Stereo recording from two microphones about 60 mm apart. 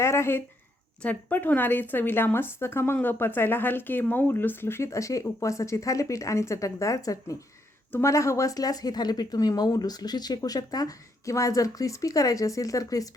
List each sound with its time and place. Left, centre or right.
0.0 s speech: left
1.0 s speech: left
4.9 s speech: left
7.9 s speech: left